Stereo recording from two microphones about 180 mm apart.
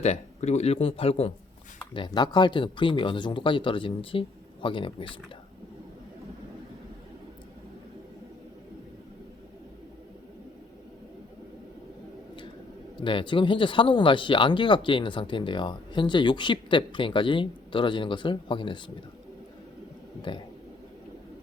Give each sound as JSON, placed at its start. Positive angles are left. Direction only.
{"t": 0.0, "sound": "speech", "side_deg": 35}
{"t": 13.0, "sound": "speech", "side_deg": 25}
{"t": 20.3, "sound": "speech", "side_deg": 25}